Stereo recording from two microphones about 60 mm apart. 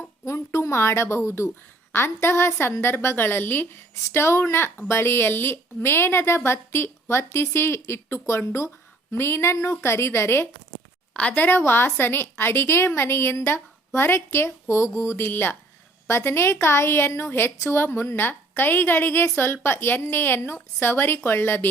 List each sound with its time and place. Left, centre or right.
0.0 s a sound: left
1.9 s a woman's voice: left
11.1 s a woman's voice: left